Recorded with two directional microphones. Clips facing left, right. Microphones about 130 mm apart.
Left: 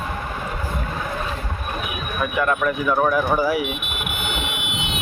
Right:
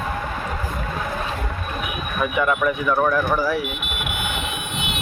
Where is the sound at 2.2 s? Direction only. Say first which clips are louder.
Right 1 dB; centre (ahead or behind).